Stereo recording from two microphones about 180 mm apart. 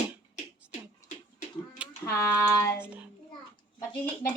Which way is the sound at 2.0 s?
15° left (ahead or behind).